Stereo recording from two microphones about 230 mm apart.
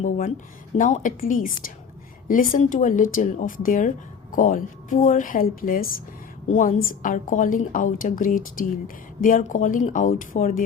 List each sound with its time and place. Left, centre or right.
0.0 s speech: left